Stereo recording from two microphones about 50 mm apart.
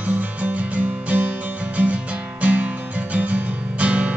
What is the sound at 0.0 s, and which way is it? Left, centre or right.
Music, right.